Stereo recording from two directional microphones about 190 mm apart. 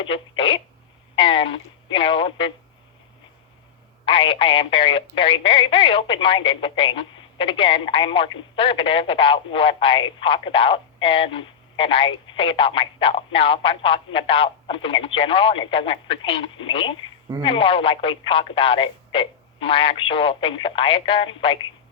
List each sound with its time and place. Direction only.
0.1 s speech: 25° left (ahead or behind)
4.0 s speech: 30° left (ahead or behind)